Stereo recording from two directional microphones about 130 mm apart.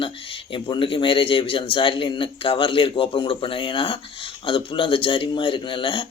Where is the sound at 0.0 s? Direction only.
45° left (ahead or behind).